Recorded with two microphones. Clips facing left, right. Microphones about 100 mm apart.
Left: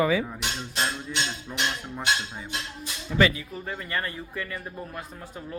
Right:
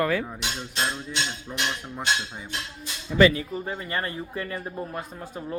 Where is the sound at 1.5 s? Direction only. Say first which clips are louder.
Even; 5° right (ahead or behind).